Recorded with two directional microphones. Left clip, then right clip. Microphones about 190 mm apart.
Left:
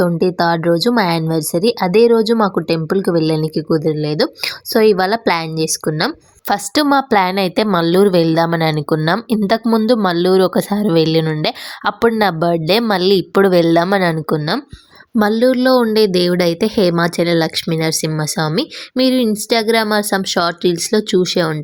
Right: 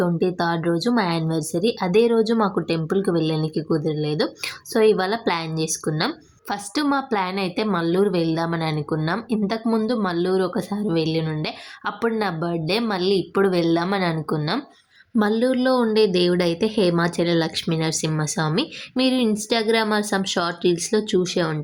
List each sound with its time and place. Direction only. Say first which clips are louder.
0.0 s a woman's voice: left 7 dB; 40° left (ahead or behind)